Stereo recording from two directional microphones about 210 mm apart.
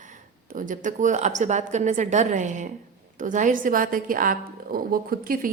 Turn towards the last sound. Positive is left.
turn(degrees=-40)  # may be behind; listen again after turning